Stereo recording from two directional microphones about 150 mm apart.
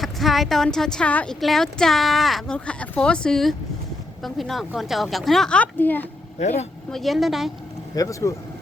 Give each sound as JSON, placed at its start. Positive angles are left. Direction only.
{"t": 0.0, "sound": "a woman's voice", "side_deg": 0}
{"t": 6.4, "sound": "speech", "side_deg": 45}
{"t": 6.9, "sound": "a woman's voice", "side_deg": 0}
{"t": 7.9, "sound": "speech", "side_deg": 20}